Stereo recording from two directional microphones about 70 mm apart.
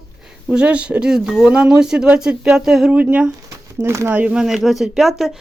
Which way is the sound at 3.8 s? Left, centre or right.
Right.